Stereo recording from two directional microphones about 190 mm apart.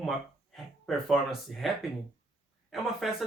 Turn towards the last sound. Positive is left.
turn(degrees=0)  # may be behind; listen again after turning